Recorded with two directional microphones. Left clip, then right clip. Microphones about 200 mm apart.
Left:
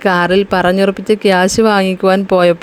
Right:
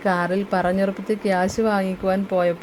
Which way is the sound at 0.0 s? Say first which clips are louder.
Left 10 dB; 35° left (ahead or behind).